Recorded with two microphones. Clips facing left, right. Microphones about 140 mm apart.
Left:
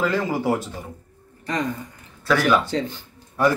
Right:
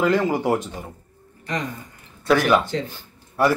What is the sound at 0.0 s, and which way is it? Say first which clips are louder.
Speech: right 3 dB; 15° right (ahead or behind).